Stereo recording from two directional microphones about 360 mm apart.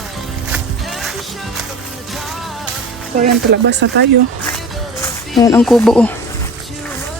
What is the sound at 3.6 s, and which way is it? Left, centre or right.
Speech, right.